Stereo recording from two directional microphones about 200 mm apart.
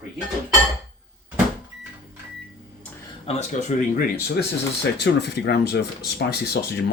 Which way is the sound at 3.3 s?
30° left (ahead or behind).